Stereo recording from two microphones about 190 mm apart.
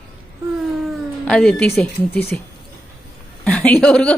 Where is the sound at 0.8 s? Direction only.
5° left (ahead or behind).